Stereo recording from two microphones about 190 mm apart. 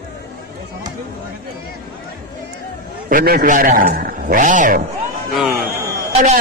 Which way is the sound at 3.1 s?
45° right (ahead or behind).